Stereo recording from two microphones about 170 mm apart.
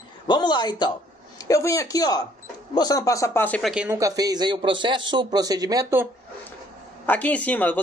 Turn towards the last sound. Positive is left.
turn(degrees=10)  # may be behind; listen again after turning